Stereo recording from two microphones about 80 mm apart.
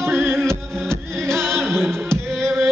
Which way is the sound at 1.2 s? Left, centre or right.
Centre.